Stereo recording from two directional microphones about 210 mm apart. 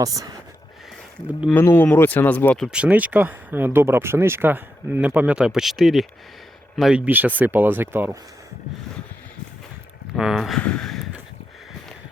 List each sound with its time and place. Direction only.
0.0 s speech: 15° right (ahead or behind)
1.3 s speech: 5° right (ahead or behind)
1.5 s speech: 10° left (ahead or behind)
2.6 s speech: 5° right (ahead or behind)
10.2 s speech: centre (ahead or behind)